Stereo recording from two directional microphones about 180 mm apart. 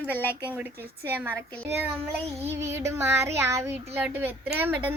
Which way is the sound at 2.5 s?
15° right (ahead or behind).